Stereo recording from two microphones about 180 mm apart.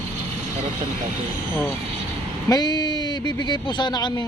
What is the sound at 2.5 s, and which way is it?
Speech, 20° left (ahead or behind).